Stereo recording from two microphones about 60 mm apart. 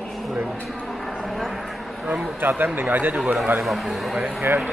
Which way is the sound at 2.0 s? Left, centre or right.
Centre.